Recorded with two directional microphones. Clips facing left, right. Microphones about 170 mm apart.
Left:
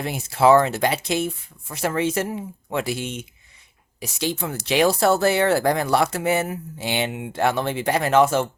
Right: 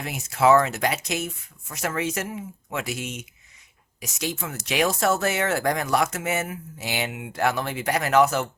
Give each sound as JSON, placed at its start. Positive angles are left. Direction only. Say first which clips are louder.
{"t": 0.0, "sound": "speech", "louder": "left 3 dB", "side_deg": 30}